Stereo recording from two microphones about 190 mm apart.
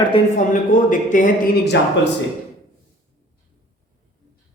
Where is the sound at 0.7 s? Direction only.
45° left (ahead or behind).